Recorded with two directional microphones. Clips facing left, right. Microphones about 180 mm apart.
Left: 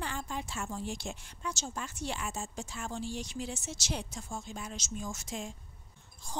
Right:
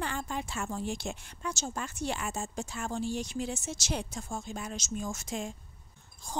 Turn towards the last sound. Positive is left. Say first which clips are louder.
# right 3 dB
turn(degrees=-45)  # may be behind; listen again after turning